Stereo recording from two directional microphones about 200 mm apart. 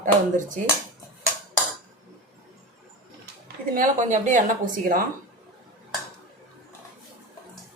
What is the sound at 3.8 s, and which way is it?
Speech, 40° right (ahead or behind).